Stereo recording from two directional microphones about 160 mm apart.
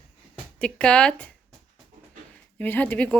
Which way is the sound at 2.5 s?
10° left (ahead or behind).